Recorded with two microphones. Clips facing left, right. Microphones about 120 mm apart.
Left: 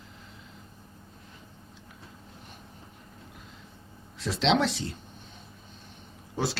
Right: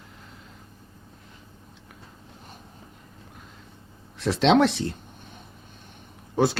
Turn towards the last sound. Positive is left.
turn(degrees=-55)  # may be behind; listen again after turning